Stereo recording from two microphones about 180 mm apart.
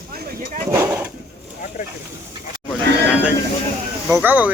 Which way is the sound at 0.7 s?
15° right (ahead or behind).